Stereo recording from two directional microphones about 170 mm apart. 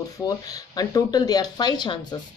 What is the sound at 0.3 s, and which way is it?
Speech, 20° left (ahead or behind).